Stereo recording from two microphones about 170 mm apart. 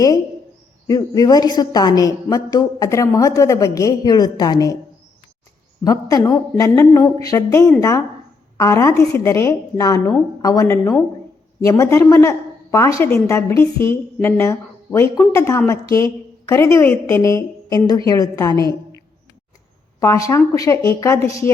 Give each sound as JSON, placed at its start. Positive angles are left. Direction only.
{"t": 0.9, "sound": "a woman's voice", "side_deg": 20}
{"t": 5.8, "sound": "a woman's voice", "side_deg": 20}
{"t": 20.0, "sound": "a woman's voice", "side_deg": 20}